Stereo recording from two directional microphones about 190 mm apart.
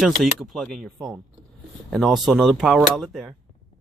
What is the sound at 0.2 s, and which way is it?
Speech, centre (ahead or behind).